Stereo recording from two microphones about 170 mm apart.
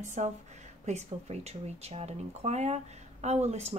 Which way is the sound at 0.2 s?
40° right (ahead or behind).